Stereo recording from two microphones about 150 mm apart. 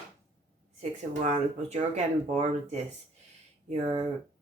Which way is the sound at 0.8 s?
50° right (ahead or behind).